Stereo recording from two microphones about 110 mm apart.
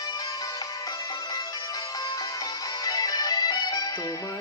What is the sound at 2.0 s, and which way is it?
Music, 35° left (ahead or behind).